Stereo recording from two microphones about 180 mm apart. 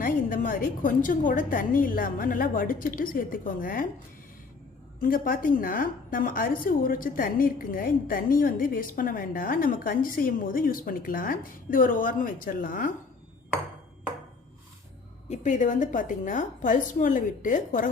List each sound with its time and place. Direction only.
0.0 s a woman's voice: 50° left (ahead or behind)
4.9 s a woman's voice: 50° left (ahead or behind)
15.3 s a woman's voice: 45° left (ahead or behind)